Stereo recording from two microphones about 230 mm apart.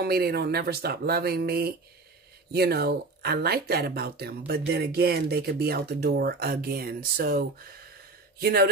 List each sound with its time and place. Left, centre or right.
0.0 s speech: right